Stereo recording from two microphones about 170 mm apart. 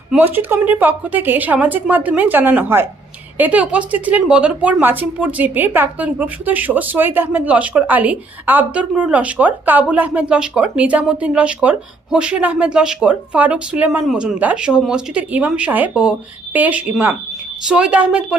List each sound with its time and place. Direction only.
0.1 s a woman's voice: 10° right (ahead or behind)